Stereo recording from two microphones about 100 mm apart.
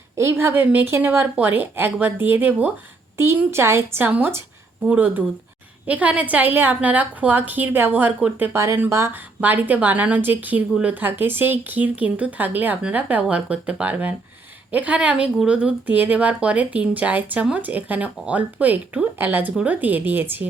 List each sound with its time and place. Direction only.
0.2 s speech: 25° right (ahead or behind)
3.2 s a woman's voice: 30° right (ahead or behind)